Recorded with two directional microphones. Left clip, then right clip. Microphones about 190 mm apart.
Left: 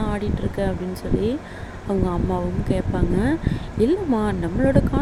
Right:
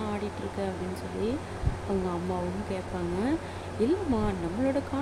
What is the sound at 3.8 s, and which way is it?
Speech, 25° left (ahead or behind).